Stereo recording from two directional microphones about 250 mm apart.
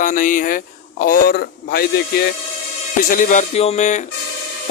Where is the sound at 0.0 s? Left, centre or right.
Left.